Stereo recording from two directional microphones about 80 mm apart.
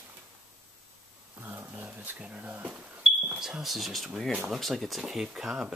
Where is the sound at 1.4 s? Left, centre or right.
Right.